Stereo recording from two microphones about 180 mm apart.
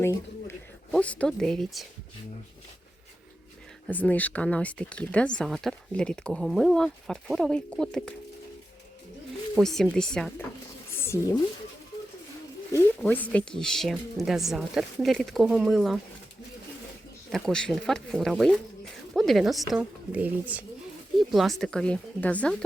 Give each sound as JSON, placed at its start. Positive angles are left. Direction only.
{"t": 0.0, "sound": "a sound", "side_deg": 15}
{"t": 0.9, "sound": "speech", "side_deg": 5}
{"t": 3.8, "sound": "speech", "side_deg": 10}
{"t": 9.6, "sound": "speech", "side_deg": 0}
{"t": 11.0, "sound": "speech", "side_deg": 15}
{"t": 12.7, "sound": "speech", "side_deg": 10}
{"t": 17.3, "sound": "speech", "side_deg": 5}